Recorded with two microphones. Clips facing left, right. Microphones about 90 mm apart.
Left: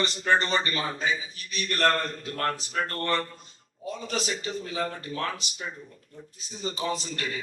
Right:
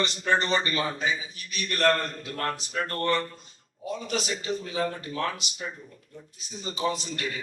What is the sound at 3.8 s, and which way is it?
Speech, 35° left (ahead or behind).